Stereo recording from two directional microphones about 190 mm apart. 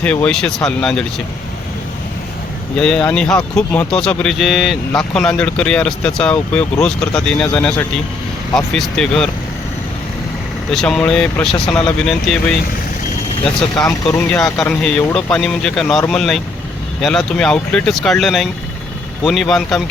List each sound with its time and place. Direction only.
0.0 s speech: 5° left (ahead or behind)
2.7 s speech: 5° left (ahead or behind)
10.7 s speech: centre (ahead or behind)
13.8 s speech: 15° left (ahead or behind)
14.7 s speech: 5° left (ahead or behind)